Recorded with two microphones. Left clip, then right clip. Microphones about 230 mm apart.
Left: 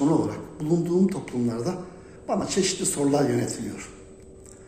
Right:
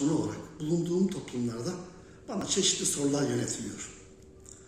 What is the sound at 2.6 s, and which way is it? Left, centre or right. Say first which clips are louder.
Speech: left 2 dB; centre.